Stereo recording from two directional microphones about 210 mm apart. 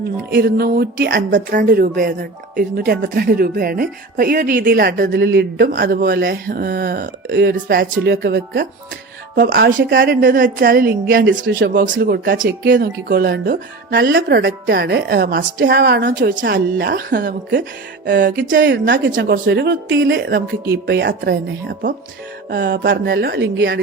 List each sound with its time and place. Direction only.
0.3 s speech: 50° right (ahead or behind)
14.1 s a woman's voice: 55° right (ahead or behind)